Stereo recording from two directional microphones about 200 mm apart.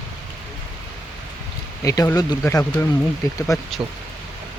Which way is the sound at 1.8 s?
15° left (ahead or behind).